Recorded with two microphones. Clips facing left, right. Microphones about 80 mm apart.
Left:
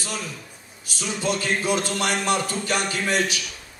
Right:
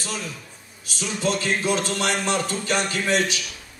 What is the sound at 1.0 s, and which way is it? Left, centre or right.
A man's voice, centre.